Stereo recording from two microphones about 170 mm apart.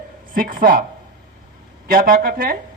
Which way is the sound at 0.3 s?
55° right (ahead or behind).